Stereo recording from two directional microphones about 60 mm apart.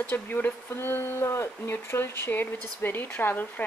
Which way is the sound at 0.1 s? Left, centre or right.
Left.